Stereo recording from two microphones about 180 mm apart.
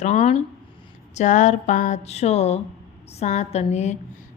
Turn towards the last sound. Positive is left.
turn(degrees=40)  # may be behind; listen again after turning